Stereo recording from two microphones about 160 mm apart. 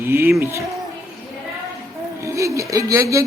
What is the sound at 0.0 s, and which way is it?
Speech, 15° right (ahead or behind).